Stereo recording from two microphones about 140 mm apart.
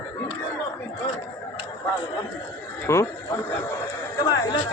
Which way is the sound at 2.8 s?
20° left (ahead or behind).